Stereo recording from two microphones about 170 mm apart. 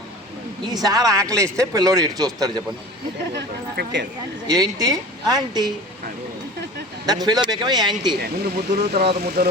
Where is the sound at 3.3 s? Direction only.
75° right (ahead or behind).